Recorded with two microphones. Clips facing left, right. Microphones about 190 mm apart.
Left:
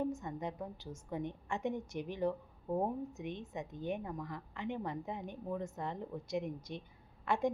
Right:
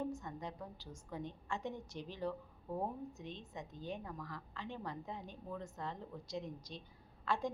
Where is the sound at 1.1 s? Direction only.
20° left (ahead or behind).